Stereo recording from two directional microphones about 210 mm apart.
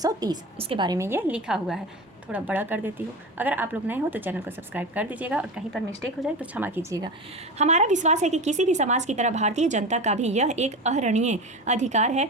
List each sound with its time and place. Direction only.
0.0 s a woman's voice: 20° right (ahead or behind)
7.6 s a woman's voice: 35° right (ahead or behind)